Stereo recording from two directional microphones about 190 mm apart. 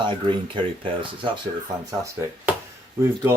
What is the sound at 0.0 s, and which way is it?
Speech, 25° right (ahead or behind).